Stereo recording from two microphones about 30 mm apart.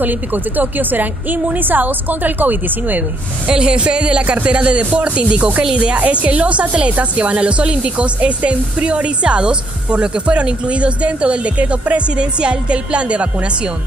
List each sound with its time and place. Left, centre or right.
0.0 s a woman's voice: right
3.4 s speech: right
5.9 s speech: right